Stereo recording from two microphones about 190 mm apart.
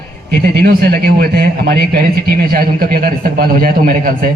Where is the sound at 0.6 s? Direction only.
55° right (ahead or behind).